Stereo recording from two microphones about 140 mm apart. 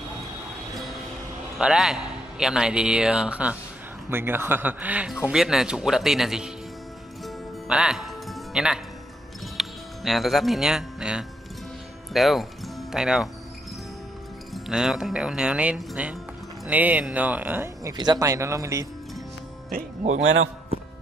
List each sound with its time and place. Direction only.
1.6 s a man's voice: 5° right (ahead or behind)
7.2 s music: 5° right (ahead or behind)
9.6 s speech: centre (ahead or behind)
14.5 s a man's voice: 5° right (ahead or behind)
17.9 s speech: 30° right (ahead or behind)
19.7 s speech: 60° right (ahead or behind)